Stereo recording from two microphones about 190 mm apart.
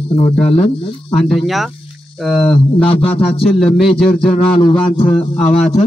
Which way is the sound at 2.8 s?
30° left (ahead or behind).